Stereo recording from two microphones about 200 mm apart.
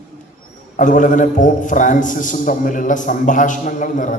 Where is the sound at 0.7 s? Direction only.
40° left (ahead or behind).